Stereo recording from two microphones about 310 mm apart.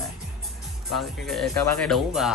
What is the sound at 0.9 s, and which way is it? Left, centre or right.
Speech, centre.